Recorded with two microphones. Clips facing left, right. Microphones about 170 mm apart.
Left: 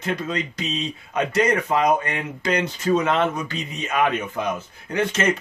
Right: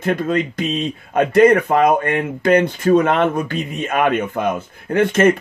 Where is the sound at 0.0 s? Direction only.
50° right (ahead or behind).